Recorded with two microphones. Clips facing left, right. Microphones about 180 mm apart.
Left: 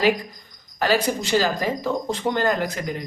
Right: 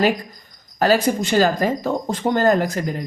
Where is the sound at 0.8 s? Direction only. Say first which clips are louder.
Right 4 dB; 45° right (ahead or behind).